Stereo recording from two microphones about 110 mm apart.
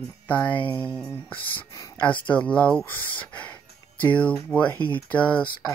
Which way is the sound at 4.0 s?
15° left (ahead or behind).